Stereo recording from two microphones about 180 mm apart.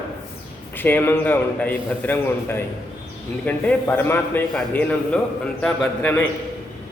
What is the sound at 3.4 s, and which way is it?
A man's voice, 10° left (ahead or behind).